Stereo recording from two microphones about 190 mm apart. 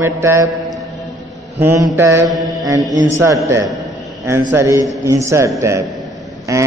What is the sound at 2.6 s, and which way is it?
Mantra, 20° right (ahead or behind).